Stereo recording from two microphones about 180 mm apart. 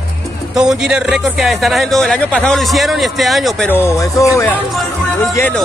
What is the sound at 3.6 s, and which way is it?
Speech, 15° left (ahead or behind).